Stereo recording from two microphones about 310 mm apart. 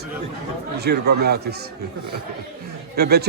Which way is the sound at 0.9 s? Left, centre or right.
Right.